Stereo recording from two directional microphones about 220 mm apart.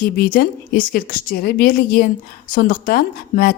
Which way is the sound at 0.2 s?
45° left (ahead or behind).